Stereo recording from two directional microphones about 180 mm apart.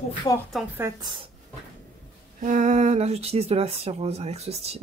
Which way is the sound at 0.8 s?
15° right (ahead or behind).